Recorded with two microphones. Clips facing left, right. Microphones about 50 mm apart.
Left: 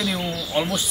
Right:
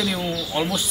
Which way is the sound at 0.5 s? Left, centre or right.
Centre.